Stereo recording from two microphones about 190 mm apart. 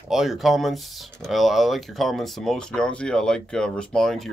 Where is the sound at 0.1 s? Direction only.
Centre (ahead or behind).